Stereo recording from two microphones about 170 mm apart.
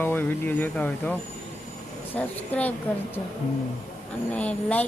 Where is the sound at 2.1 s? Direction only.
10° left (ahead or behind).